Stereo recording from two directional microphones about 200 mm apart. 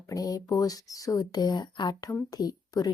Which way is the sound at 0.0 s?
15° left (ahead or behind).